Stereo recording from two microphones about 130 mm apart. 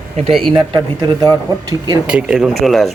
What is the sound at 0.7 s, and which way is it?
Speech, 30° right (ahead or behind).